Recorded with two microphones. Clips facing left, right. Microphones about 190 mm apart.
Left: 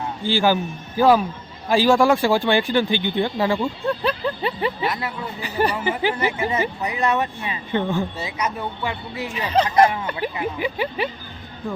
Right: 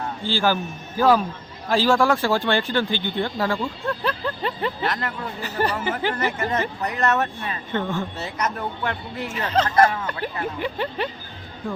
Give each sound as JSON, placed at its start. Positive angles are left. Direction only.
{"t": 0.3, "sound": "speech", "side_deg": 15}